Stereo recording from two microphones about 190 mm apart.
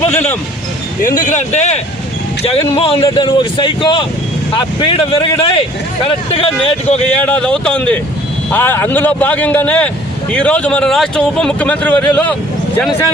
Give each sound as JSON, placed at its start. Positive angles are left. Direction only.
{"t": 0.1, "sound": "speech", "side_deg": 10}
{"t": 1.0, "sound": "speech", "side_deg": 40}
{"t": 7.1, "sound": "speech", "side_deg": 10}